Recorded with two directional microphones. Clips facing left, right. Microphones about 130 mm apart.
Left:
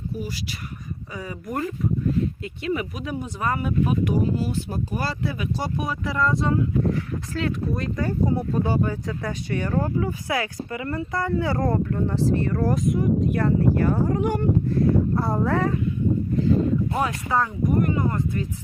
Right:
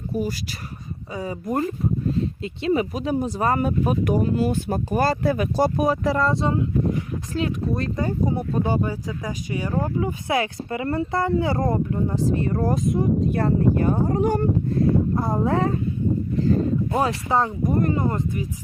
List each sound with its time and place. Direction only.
0.1 s speech: 45° right (ahead or behind)
1.1 s speech: 25° right (ahead or behind)
14.1 s speech: 35° right (ahead or behind)
16.9 s speech: 30° right (ahead or behind)